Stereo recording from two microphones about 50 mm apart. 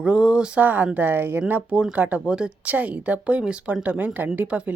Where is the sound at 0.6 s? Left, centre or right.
Right.